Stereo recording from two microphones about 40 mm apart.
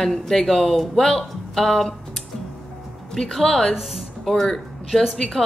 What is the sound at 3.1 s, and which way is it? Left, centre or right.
Speech, centre.